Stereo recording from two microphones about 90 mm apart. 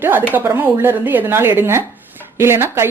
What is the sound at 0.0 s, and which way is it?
Speech, 20° right (ahead or behind).